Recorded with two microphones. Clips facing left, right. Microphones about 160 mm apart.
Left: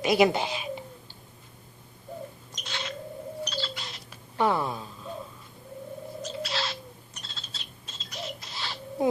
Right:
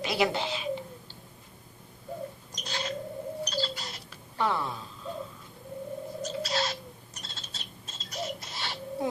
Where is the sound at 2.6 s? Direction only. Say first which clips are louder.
Right 2 dB; 40° right (ahead or behind).